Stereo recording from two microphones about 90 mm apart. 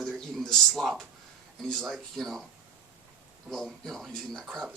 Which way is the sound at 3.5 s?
Centre (ahead or behind).